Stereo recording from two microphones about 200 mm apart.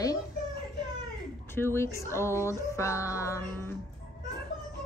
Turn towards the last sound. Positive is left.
turn(degrees=10)  # may be behind; listen again after turning